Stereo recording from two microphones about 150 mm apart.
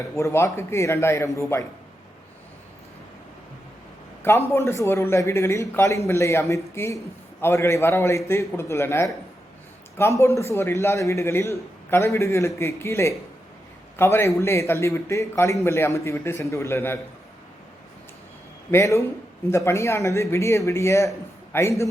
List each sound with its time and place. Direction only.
0.2 s speech: 20° left (ahead or behind)
4.2 s a man's voice: 15° left (ahead or behind)
18.7 s a man's voice: 20° left (ahead or behind)